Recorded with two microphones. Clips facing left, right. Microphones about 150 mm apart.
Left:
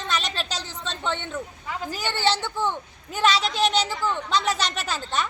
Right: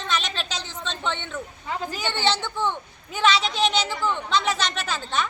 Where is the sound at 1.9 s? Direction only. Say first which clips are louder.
Left 1 dB; 5° left (ahead or behind).